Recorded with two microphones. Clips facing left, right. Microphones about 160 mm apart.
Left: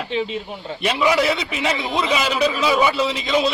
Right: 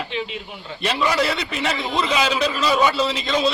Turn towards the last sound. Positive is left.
turn(degrees=0)  # may be behind; listen again after turning